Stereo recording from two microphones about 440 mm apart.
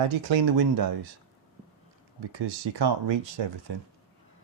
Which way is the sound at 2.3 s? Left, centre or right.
Right.